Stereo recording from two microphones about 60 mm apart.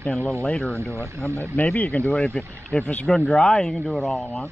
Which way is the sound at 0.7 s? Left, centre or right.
Right.